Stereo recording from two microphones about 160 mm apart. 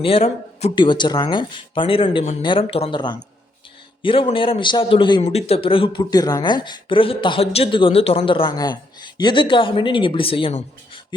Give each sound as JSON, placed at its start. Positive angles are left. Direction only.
{"t": 0.0, "sound": "a man's voice", "side_deg": 35}